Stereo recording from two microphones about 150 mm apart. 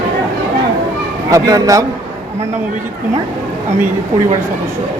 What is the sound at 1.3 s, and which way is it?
Speech, 20° right (ahead or behind).